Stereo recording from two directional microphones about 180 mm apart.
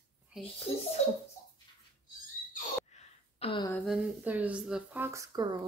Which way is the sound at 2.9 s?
35° left (ahead or behind).